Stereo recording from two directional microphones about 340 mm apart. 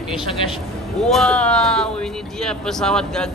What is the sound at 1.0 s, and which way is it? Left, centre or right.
A man's voice, centre.